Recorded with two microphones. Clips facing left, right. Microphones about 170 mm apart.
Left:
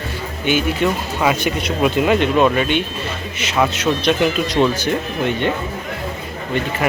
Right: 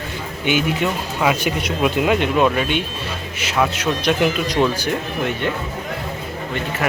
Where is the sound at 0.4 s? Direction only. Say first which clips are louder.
Left 1 dB; 15° right (ahead or behind).